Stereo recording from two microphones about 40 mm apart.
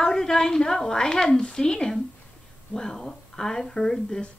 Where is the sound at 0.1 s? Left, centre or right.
Centre.